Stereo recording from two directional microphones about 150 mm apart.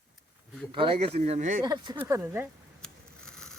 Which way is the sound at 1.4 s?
60° right (ahead or behind).